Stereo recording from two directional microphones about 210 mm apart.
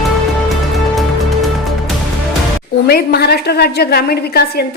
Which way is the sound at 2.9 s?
50° left (ahead or behind).